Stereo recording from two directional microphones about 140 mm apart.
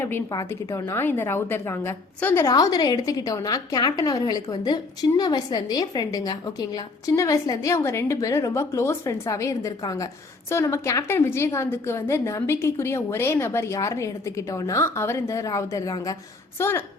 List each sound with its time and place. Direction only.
0.3 s a woman's voice: 25° left (ahead or behind)